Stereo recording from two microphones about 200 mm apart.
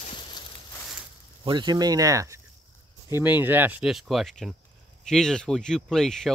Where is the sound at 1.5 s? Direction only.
20° right (ahead or behind).